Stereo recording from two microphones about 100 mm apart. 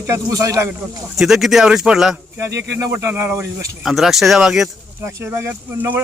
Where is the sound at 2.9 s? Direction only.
20° right (ahead or behind).